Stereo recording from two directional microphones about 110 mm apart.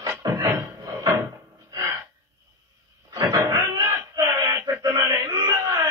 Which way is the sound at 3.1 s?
30° right (ahead or behind).